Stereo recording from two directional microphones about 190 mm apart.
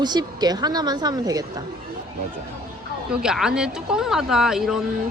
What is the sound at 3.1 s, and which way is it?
Speech, 5° right (ahead or behind).